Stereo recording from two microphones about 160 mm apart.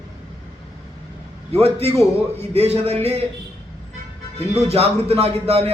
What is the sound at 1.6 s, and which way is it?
A man's voice, 40° right (ahead or behind).